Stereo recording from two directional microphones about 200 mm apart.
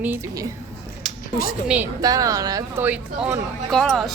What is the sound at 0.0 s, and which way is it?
Speech, 10° right (ahead or behind).